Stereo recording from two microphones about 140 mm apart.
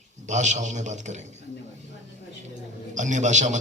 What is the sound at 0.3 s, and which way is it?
Speech, 60° right (ahead or behind).